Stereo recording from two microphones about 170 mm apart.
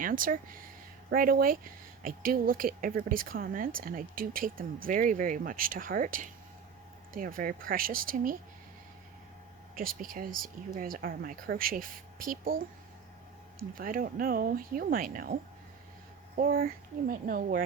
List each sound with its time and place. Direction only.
0.0 s speech: 55° right (ahead or behind)
9.7 s speech: 55° right (ahead or behind)
13.7 s speech: 55° right (ahead or behind)
16.4 s speech: 60° right (ahead or behind)